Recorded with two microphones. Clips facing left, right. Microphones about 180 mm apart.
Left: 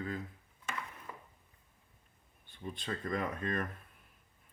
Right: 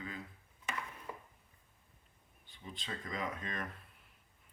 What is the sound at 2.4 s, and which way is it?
Speech, 55° left (ahead or behind).